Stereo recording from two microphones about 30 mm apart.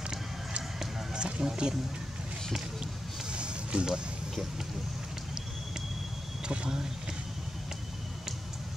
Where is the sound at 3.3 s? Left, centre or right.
Right.